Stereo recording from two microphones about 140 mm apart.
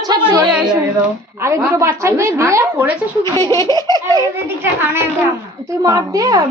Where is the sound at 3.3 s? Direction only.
25° left (ahead or behind).